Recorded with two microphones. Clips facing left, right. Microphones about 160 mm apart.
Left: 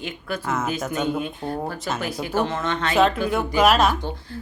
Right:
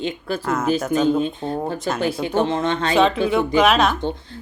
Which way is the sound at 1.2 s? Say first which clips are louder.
Right 4 dB; 25° right (ahead or behind).